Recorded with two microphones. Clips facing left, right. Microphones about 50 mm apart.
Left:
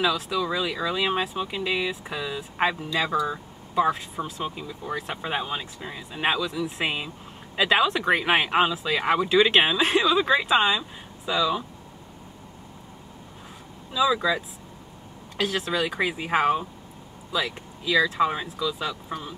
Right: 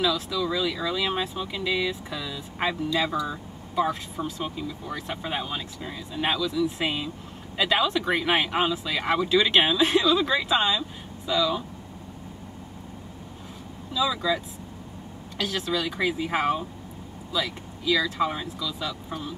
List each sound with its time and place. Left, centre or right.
0.0 s speech: left
13.9 s speech: centre
15.4 s speech: left